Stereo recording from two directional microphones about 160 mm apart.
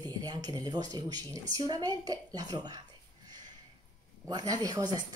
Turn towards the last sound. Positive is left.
turn(degrees=-25)  # may be behind; listen again after turning